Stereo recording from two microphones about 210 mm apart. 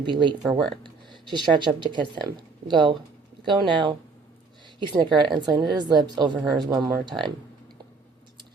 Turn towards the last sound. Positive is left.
turn(degrees=-20)  # may be behind; listen again after turning